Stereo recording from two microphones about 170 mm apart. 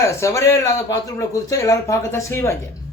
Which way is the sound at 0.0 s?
15° left (ahead or behind).